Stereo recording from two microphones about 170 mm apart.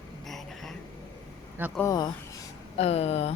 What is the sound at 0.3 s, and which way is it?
Vehicle, centre (ahead or behind).